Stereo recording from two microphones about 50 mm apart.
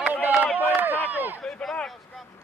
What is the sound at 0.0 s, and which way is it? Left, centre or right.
Run, right.